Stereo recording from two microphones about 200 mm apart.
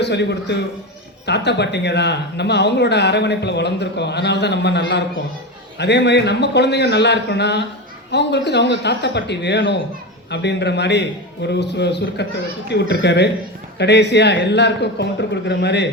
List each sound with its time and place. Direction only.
0.0 s speech: 60° left (ahead or behind)